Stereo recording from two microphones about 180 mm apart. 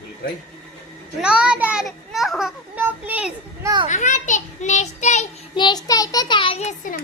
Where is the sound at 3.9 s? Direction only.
45° left (ahead or behind).